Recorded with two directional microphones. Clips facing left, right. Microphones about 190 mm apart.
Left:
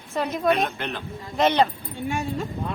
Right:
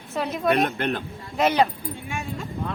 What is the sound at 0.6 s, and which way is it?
Speech, 50° right (ahead or behind).